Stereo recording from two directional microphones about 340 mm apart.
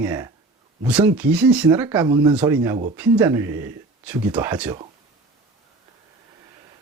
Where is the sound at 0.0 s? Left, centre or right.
Centre.